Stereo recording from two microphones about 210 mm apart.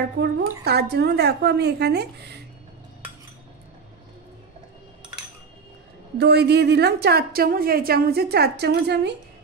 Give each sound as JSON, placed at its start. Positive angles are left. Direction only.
{"t": 0.2, "sound": "a woman's voice", "side_deg": -55}
{"t": 6.1, "sound": "a woman's voice", "side_deg": -50}